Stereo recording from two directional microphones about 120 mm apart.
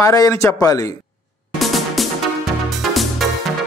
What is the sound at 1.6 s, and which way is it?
Music, centre (ahead or behind).